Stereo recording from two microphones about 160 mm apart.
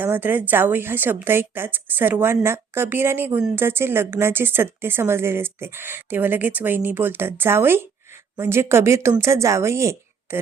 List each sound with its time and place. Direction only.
0.0 s a woman's voice: 10° right (ahead or behind)